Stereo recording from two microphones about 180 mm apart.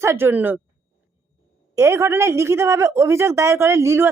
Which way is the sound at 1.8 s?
15° right (ahead or behind).